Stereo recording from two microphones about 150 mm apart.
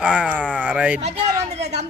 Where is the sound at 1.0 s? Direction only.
45° right (ahead or behind).